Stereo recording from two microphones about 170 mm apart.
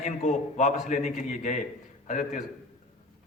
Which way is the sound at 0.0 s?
45° left (ahead or behind).